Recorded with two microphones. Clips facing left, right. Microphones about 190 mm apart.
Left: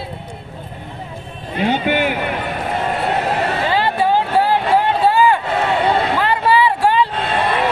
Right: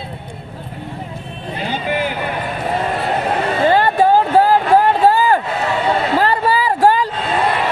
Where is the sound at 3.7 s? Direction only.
45° right (ahead or behind).